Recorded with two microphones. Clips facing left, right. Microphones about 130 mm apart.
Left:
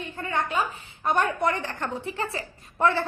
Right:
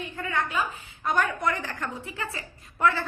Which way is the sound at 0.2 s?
35° left (ahead or behind).